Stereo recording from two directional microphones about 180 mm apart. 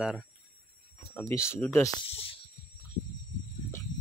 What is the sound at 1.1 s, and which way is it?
Speech, 15° left (ahead or behind).